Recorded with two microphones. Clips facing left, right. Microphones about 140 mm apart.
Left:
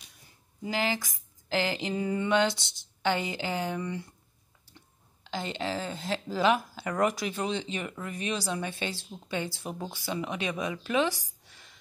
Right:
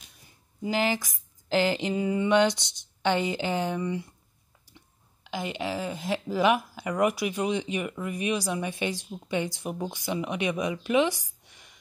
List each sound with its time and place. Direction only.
0.7 s speech: 20° right (ahead or behind)
5.2 s speech: 10° right (ahead or behind)